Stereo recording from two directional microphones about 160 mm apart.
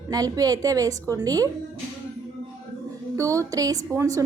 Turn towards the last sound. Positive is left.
turn(degrees=-20)  # may be behind; listen again after turning